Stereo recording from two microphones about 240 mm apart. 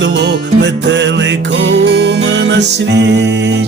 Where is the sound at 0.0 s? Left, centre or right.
Right.